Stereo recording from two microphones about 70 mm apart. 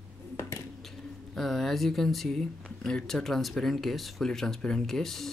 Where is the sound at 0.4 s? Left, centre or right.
Left.